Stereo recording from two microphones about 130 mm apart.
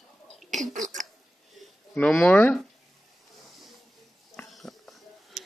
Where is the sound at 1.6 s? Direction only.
5° left (ahead or behind).